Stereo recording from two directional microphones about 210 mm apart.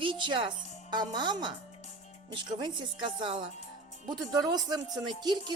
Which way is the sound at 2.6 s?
20° right (ahead or behind).